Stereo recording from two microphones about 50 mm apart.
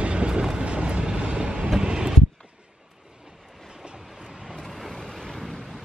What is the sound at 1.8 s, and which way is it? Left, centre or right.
Vehicle, centre.